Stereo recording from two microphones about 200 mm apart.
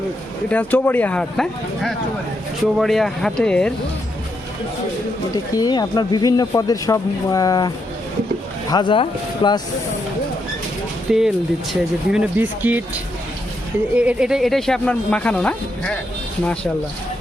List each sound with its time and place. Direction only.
0.5 s speech: 10° left (ahead or behind)
5.5 s speech: 20° left (ahead or behind)
8.7 s speech: 25° left (ahead or behind)
11.1 s speech: centre (ahead or behind)